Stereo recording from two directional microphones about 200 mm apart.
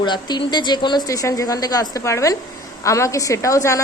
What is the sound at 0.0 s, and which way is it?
A woman's voice, 20° left (ahead or behind).